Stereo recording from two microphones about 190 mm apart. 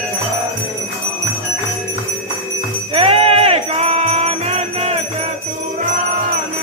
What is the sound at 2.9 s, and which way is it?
Jingle bell, 30° right (ahead or behind).